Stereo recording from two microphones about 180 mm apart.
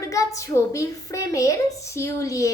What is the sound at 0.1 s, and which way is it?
A woman's voice, 20° left (ahead or behind).